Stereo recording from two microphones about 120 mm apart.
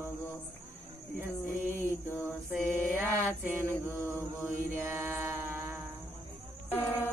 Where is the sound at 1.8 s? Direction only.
20° right (ahead or behind).